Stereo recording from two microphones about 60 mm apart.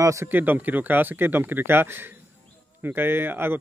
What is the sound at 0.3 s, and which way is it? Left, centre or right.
Speech, right.